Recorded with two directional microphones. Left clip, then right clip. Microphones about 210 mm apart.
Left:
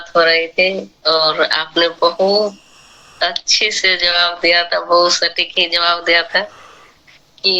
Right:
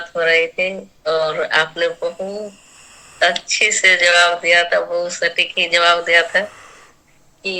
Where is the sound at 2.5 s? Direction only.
20° left (ahead or behind).